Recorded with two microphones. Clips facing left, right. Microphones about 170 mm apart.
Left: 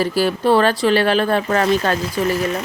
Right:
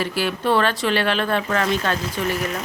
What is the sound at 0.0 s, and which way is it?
Speech, 35° left (ahead or behind).